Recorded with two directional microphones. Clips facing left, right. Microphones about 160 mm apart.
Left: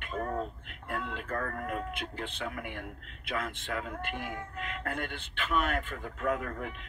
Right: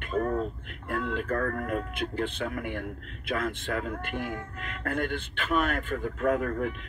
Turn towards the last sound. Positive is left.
turn(degrees=-45)  # may be behind; listen again after turning